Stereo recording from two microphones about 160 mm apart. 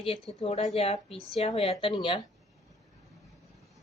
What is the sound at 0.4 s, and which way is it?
Speech, 40° left (ahead or behind).